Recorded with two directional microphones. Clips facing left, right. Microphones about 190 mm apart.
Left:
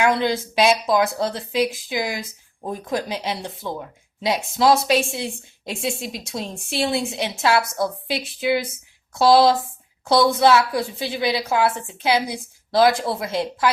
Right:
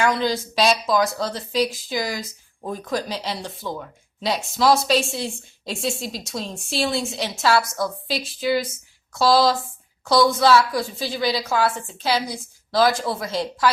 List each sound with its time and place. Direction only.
0.1 s a woman's voice: 20° left (ahead or behind)